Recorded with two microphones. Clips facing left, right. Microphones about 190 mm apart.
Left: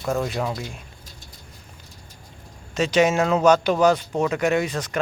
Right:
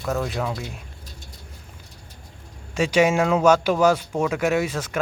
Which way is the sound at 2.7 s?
10° right (ahead or behind).